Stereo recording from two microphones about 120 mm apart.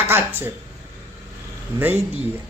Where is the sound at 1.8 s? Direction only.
15° right (ahead or behind).